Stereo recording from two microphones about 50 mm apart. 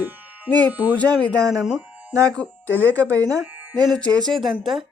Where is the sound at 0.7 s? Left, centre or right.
Right.